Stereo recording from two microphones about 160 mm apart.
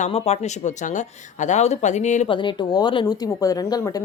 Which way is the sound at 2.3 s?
30° left (ahead or behind).